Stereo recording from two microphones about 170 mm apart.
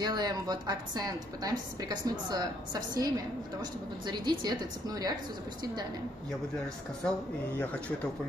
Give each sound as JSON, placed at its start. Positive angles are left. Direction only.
{"t": 0.0, "sound": "a woman's voice", "side_deg": -25}
{"t": 7.0, "sound": "speech", "side_deg": 5}